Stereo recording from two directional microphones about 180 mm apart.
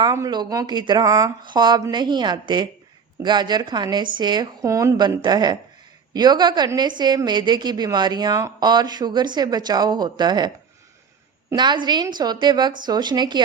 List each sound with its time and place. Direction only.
0.0 s a woman's voice: 20° right (ahead or behind)